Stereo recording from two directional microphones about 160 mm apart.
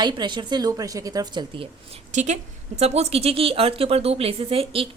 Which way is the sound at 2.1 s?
45° right (ahead or behind).